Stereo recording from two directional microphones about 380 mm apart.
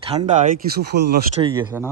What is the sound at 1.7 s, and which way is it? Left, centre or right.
Speech, centre.